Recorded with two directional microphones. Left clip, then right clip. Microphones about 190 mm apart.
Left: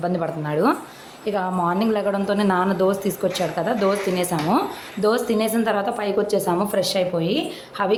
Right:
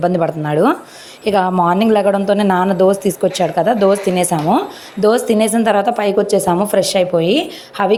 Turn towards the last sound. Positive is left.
turn(degrees=-35)  # may be behind; listen again after turning